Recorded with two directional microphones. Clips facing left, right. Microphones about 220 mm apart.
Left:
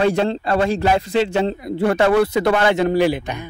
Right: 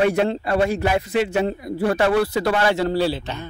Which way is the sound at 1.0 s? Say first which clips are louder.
Left 2 dB; 30° left (ahead or behind).